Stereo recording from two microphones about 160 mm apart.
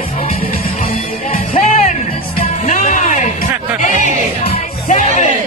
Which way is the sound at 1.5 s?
50° left (ahead or behind).